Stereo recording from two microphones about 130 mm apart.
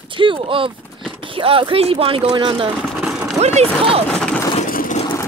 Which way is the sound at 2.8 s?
5° right (ahead or behind).